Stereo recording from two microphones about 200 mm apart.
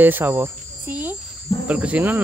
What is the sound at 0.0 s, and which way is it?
Speech, 10° right (ahead or behind).